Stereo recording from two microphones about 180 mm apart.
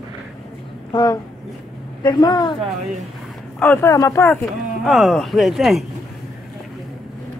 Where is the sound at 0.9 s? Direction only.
25° left (ahead or behind).